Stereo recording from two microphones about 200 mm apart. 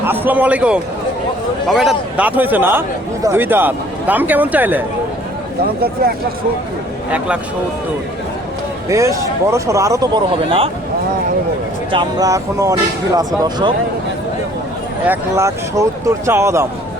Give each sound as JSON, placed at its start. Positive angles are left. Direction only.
{"t": 0.0, "sound": "a man's voice", "side_deg": -10}
{"t": 8.9, "sound": "speech", "side_deg": -15}
{"t": 11.9, "sound": "speech", "side_deg": -20}
{"t": 15.0, "sound": "speech", "side_deg": -10}